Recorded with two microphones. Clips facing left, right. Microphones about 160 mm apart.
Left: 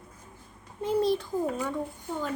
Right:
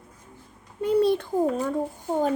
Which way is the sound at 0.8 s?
65° right (ahead or behind).